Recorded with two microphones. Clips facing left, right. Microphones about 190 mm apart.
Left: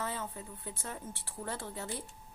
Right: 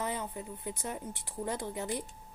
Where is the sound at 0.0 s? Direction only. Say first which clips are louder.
Right 3 dB; 15° right (ahead or behind).